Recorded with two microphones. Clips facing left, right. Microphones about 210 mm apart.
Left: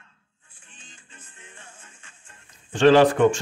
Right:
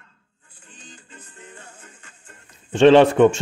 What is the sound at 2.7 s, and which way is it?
Speech, 25° right (ahead or behind).